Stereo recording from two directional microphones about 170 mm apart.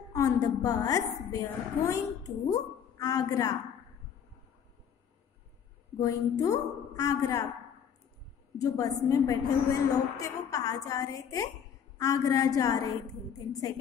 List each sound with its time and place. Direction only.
0.1 s a woman's voice: 20° left (ahead or behind)
5.9 s a woman's voice: 20° left (ahead or behind)
8.5 s a woman's voice: 20° left (ahead or behind)